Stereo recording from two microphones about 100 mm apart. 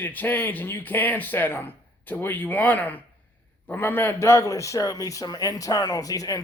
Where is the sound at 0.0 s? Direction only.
20° left (ahead or behind).